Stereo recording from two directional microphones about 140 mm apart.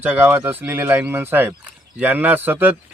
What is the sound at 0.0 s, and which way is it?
Speech, 15° right (ahead or behind).